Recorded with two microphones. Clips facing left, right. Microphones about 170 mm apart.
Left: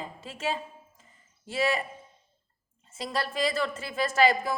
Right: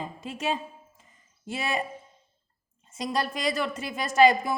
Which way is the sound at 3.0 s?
20° right (ahead or behind).